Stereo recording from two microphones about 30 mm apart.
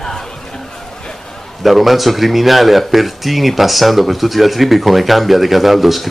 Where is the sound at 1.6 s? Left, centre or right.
Centre.